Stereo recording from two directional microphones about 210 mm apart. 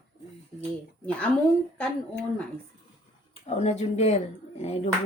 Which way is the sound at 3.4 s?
30° left (ahead or behind).